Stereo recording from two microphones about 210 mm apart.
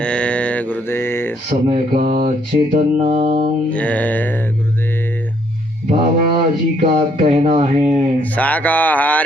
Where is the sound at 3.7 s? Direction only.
5° left (ahead or behind).